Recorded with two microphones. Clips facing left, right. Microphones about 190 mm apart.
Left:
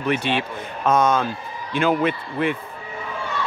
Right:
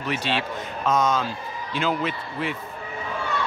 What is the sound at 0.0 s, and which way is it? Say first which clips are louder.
Speech: left 4 dB; 55° left (ahead or behind).